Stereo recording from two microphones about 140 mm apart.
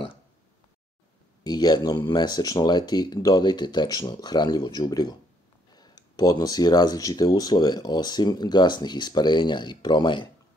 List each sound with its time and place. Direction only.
1.4 s speech: 30° left (ahead or behind)